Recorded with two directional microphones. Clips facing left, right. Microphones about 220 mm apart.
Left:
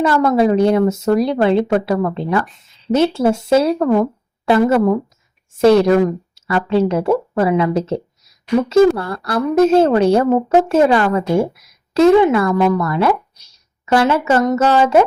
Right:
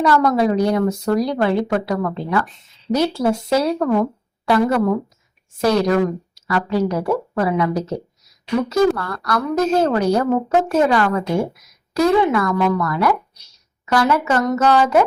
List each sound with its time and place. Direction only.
0.0 s a woman's voice: 25° left (ahead or behind)